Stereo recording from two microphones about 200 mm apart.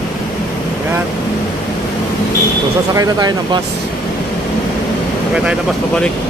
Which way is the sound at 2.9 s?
20° right (ahead or behind).